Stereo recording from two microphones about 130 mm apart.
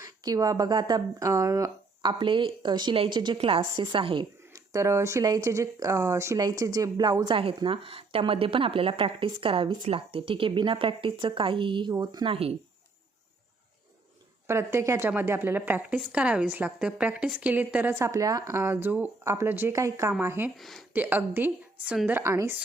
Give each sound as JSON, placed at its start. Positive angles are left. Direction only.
{"t": 0.0, "sound": "speech", "side_deg": -25}
{"t": 2.0, "sound": "speech", "side_deg": -40}
{"t": 4.5, "sound": "speech", "side_deg": -25}
{"t": 14.4, "sound": "a woman's voice", "side_deg": -20}
{"t": 17.9, "sound": "a woman's voice", "side_deg": -25}
{"t": 20.6, "sound": "speech", "side_deg": 0}
{"t": 20.9, "sound": "a woman's voice", "side_deg": -15}